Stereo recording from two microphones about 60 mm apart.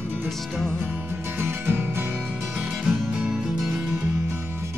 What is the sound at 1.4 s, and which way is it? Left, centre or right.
Music, right.